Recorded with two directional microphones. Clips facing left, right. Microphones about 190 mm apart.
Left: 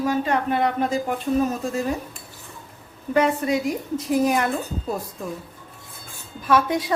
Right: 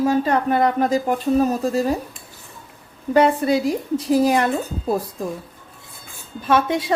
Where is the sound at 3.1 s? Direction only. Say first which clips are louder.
Right 4 dB; 30° right (ahead or behind).